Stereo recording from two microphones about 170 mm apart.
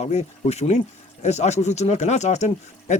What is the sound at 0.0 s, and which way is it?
Speech, 40° left (ahead or behind).